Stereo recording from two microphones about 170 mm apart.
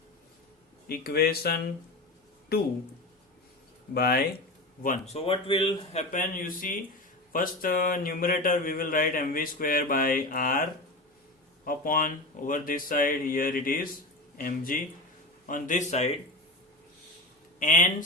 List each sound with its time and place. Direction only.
0.9 s speech: 65° left (ahead or behind)
3.9 s speech: 65° left (ahead or behind)
5.1 s a man's voice: 35° left (ahead or behind)
17.6 s speech: 50° left (ahead or behind)